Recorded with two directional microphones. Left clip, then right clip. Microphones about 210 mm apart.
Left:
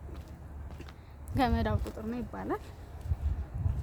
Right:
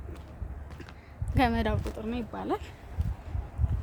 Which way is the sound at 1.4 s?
Centre (ahead or behind).